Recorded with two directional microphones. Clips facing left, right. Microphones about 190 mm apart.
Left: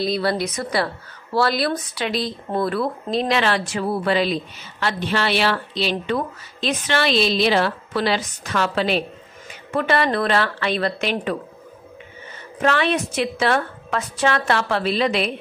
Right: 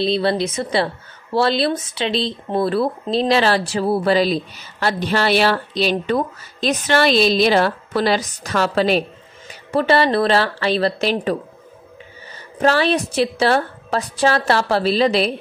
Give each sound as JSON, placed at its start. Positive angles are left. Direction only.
{"t": 0.0, "sound": "speech", "side_deg": -25}
{"t": 12.6, "sound": "speech", "side_deg": -35}